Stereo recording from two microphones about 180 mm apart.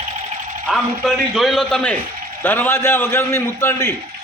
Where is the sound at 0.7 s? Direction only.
Centre (ahead or behind).